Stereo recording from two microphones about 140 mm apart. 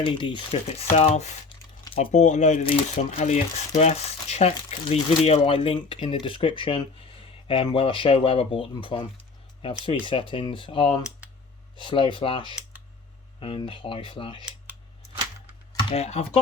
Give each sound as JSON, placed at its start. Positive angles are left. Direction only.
{"t": 0.0, "sound": "speech", "side_deg": 35}
{"t": 10.1, "sound": "speech", "side_deg": 40}
{"t": 15.8, "sound": "speech", "side_deg": 45}